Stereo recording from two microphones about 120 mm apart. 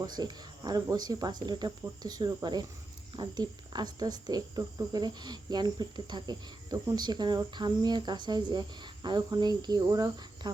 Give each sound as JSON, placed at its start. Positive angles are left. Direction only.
{"t": 0.0, "sound": "speech", "side_deg": -35}